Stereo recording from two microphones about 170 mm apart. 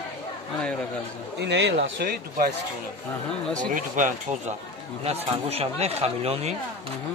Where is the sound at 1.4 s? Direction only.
90° right; by 2.5 s 60° right (ahead or behind).